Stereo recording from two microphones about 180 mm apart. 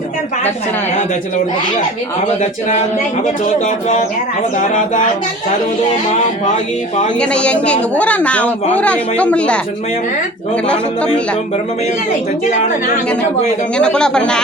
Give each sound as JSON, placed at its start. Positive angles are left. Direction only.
{"t": 3.6, "sound": "speech", "side_deg": 45}
{"t": 7.2, "sound": "a woman's voice", "side_deg": 5}
{"t": 13.7, "sound": "speech", "side_deg": 5}